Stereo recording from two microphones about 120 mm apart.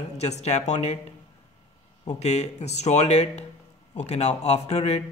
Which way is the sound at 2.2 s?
65° left (ahead or behind).